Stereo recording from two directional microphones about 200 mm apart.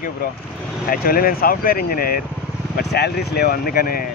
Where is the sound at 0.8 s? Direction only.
45° left (ahead or behind).